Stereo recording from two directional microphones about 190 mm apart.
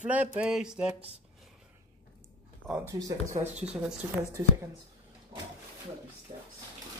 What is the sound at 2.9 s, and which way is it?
Speech, 20° right (ahead or behind).